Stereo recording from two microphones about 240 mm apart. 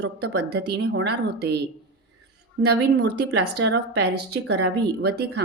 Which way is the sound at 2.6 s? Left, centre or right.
Right.